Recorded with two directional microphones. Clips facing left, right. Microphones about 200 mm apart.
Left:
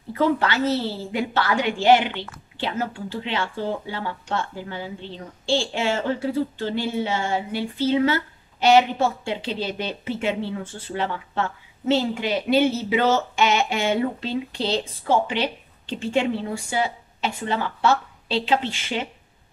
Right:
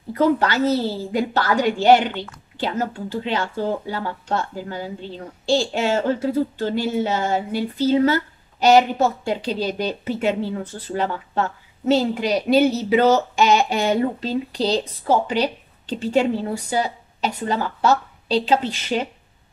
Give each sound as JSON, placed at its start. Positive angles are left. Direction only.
{"t": 0.1, "sound": "speech", "side_deg": -40}